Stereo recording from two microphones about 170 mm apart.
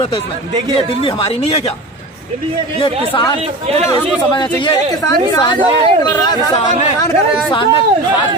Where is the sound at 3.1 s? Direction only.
30° left (ahead or behind).